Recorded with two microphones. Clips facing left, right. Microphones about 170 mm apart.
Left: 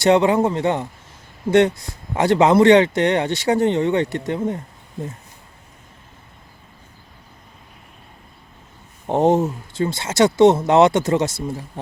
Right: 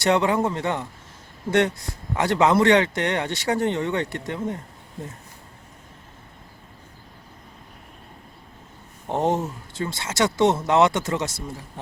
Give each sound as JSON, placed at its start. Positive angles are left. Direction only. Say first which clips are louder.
{"t": 0.0, "sound": "speech", "louder": "left 5 dB", "side_deg": 25}
{"t": 9.0, "sound": "speech", "louder": "left 7 dB", "side_deg": 25}